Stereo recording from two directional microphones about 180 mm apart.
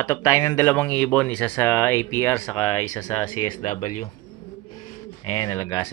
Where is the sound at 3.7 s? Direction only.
35° left (ahead or behind).